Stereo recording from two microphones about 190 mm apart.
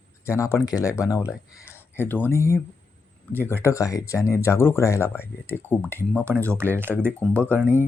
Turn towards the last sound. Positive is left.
turn(degrees=10)  # may be behind; listen again after turning